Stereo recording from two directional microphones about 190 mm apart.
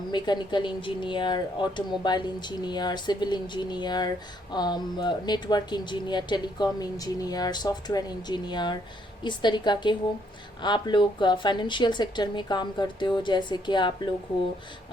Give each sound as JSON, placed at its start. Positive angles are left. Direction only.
{"t": 0.1, "sound": "speech", "side_deg": 25}